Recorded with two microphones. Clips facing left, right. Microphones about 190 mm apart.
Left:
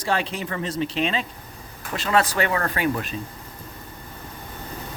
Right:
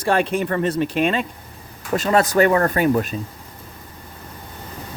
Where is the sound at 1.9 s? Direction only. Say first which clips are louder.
Right 5 dB; 45° right (ahead or behind).